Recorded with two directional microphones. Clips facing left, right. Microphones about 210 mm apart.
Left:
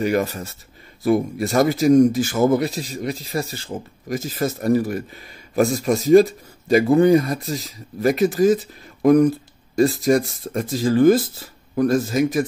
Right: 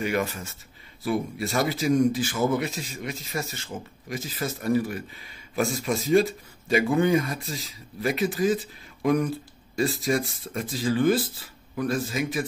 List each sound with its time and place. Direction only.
0.0 s speech: 40° left (ahead or behind)